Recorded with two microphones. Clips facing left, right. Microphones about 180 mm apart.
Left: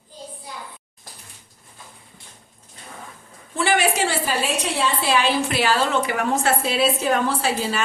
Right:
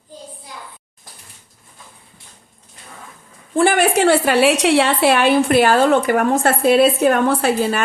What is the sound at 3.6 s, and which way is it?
Speech, 55° right (ahead or behind).